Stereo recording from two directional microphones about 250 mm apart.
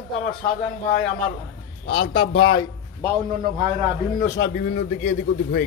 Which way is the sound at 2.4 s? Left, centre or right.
Centre.